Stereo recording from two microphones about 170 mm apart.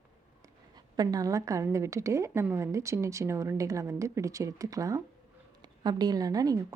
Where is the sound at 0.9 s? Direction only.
20° right (ahead or behind).